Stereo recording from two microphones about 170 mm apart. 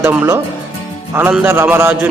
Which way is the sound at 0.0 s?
15° right (ahead or behind).